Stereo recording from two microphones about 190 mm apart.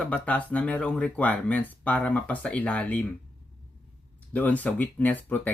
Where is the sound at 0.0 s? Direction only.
10° left (ahead or behind).